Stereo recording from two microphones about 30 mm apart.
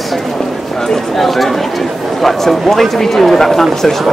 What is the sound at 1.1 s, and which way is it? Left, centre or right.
A man's voice, centre.